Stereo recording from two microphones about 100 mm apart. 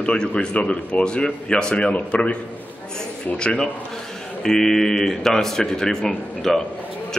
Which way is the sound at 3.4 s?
10° left (ahead or behind).